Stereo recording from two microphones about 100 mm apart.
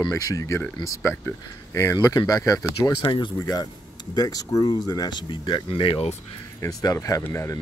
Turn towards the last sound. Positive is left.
turn(degrees=25)  # may be behind; listen again after turning